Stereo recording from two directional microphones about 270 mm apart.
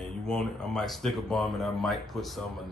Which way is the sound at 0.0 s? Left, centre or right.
Centre.